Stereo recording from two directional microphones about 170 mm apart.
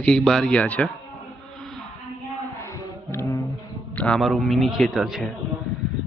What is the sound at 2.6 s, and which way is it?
Music, 15° left (ahead or behind).